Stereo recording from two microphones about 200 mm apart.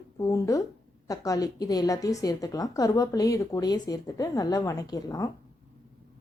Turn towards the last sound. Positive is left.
turn(degrees=20)  # may be behind; listen again after turning